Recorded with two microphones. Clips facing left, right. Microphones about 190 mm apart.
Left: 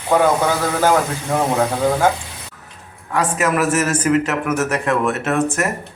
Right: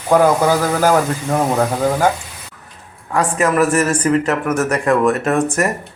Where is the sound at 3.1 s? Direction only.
5° left (ahead or behind).